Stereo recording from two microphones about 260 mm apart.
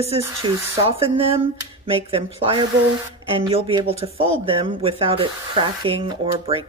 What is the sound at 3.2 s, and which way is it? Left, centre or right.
Speech, right.